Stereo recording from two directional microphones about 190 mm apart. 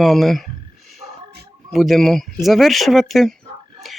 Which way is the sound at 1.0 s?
30° right (ahead or behind).